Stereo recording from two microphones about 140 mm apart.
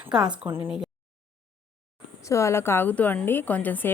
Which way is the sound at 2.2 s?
20° left (ahead or behind).